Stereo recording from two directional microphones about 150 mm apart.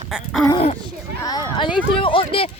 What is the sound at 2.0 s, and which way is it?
Speech, 35° left (ahead or behind).